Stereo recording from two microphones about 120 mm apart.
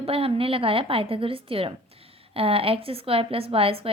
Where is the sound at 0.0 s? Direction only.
50° right (ahead or behind).